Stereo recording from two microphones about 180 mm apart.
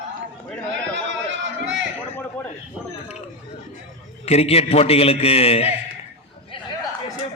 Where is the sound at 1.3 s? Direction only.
90° right.